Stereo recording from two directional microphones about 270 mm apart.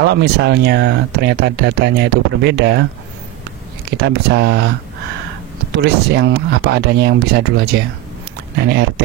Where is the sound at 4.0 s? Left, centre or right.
Right.